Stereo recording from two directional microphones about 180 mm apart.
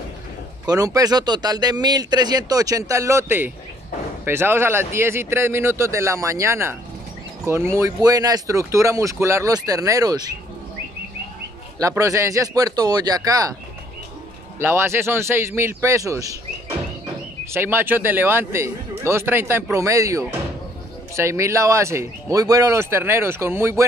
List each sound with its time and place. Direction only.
0.7 s speech: 20° right (ahead or behind)
11.9 s speech: 15° right (ahead or behind)
14.6 s speech: 15° right (ahead or behind)
17.5 s speech: 10° right (ahead or behind)